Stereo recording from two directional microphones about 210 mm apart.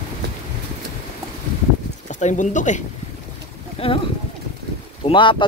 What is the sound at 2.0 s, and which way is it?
Speech, 35° left (ahead or behind).